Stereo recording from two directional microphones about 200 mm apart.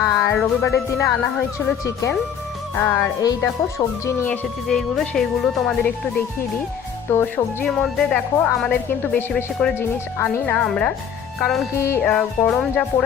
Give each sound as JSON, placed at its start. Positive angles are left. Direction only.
{"t": 0.0, "sound": "music", "side_deg": 10}
{"t": 0.9, "sound": "speech", "side_deg": 15}
{"t": 4.7, "sound": "speech", "side_deg": 0}
{"t": 11.7, "sound": "speech", "side_deg": 15}